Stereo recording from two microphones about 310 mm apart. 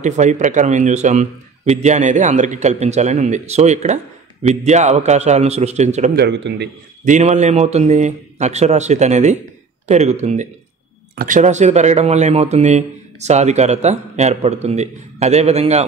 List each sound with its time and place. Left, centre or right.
0.0 s a man's voice: right